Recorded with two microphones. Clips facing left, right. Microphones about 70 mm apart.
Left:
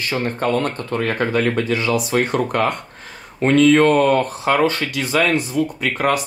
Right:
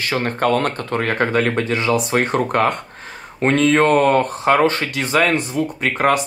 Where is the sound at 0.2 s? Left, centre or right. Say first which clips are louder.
Right 2 dB; right.